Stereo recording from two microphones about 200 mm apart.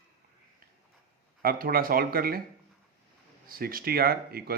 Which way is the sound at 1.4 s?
45° right (ahead or behind).